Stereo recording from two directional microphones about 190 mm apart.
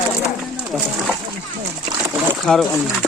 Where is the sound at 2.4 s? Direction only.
Centre (ahead or behind).